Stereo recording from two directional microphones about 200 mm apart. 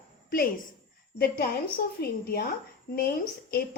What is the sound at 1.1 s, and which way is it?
A woman's voice, 45° left (ahead or behind).